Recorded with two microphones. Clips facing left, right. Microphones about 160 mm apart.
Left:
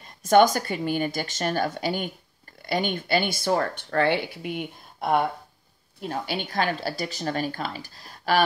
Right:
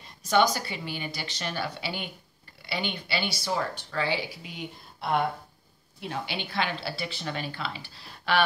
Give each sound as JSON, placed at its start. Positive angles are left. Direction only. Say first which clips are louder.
{"t": 0.0, "sound": "speech", "louder": "left 6 dB", "side_deg": 50}
{"t": 5.9, "sound": "speech", "louder": "left 4 dB", "side_deg": 45}